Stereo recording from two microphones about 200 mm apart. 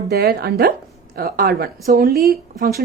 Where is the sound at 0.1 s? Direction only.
55° right (ahead or behind).